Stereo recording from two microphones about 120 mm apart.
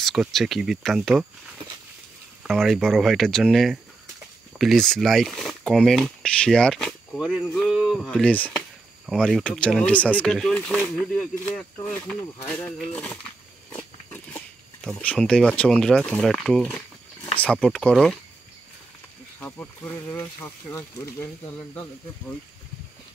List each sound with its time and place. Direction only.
0.0 s speech: centre (ahead or behind)
2.4 s speech: centre (ahead or behind)
8.1 s speech: 10° left (ahead or behind)
12.7 s speech: 10° left (ahead or behind)
14.1 s a sound: 15° left (ahead or behind)
14.9 s speech: 10° left (ahead or behind)
19.4 s speech: 15° left (ahead or behind)